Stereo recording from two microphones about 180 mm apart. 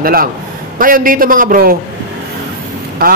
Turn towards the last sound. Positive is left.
turn(degrees=-55)  # may be behind; listen again after turning